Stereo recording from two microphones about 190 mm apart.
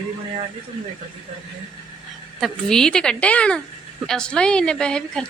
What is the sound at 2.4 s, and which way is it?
Speech, 5° left (ahead or behind).